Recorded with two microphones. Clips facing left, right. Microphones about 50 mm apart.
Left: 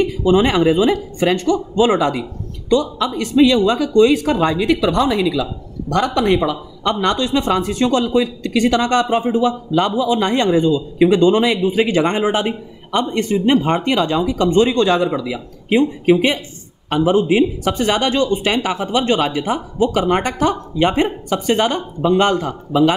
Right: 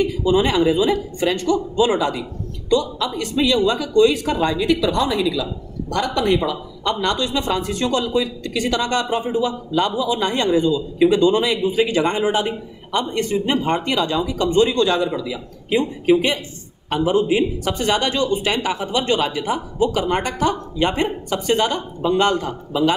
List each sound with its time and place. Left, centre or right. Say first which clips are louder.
0.2 s a man's voice: left 4 dB; left
15.7 s a man's voice: left 3 dB; left